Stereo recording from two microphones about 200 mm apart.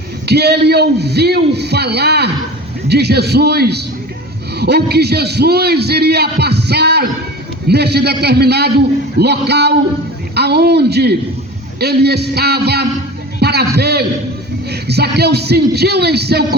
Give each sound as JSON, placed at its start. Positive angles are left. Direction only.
{"t": 0.3, "sound": "a man's voice", "side_deg": -55}